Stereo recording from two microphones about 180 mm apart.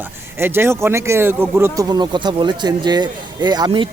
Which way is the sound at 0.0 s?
15° right (ahead or behind).